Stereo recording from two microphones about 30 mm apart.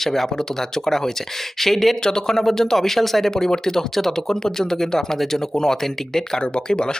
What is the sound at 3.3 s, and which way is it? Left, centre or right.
Speech, centre.